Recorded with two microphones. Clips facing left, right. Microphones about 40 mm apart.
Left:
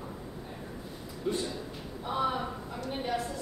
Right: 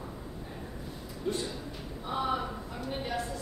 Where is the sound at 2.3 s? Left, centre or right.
Centre.